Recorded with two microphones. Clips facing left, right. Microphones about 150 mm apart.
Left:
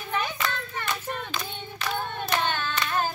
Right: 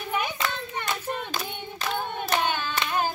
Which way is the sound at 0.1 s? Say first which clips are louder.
Even; 15° right (ahead or behind).